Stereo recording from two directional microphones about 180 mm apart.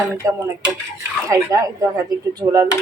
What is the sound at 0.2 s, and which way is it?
Speech, 20° right (ahead or behind).